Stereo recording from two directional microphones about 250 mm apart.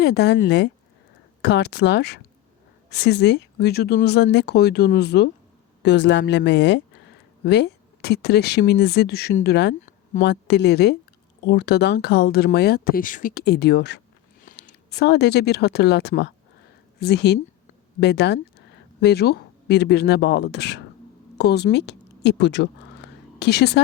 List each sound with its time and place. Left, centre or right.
0.0 s speech: left